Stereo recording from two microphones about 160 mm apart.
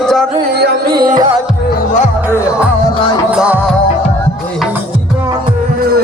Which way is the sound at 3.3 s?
10° right (ahead or behind).